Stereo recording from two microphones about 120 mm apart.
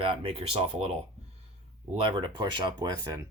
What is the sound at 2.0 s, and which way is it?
Speech, 45° right (ahead or behind).